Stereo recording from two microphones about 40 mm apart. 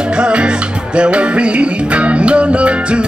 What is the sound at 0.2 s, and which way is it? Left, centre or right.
Music, right.